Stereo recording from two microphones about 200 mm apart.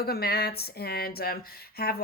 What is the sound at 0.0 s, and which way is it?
Speech, 50° left (ahead or behind).